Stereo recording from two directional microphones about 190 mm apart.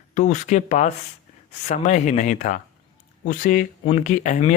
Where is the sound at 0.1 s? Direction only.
40° left (ahead or behind).